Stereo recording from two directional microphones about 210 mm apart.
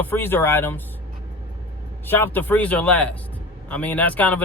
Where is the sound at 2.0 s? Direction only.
10° left (ahead or behind).